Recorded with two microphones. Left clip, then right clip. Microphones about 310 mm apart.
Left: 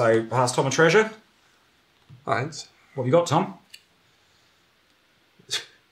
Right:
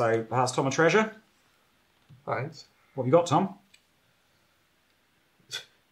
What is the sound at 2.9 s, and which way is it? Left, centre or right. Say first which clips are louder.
Speech: left 2 dB; centre.